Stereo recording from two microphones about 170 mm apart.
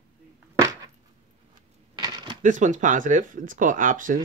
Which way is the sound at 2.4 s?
50° right (ahead or behind).